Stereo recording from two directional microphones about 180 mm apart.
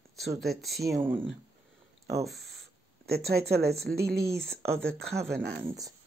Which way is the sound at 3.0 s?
60° right (ahead or behind).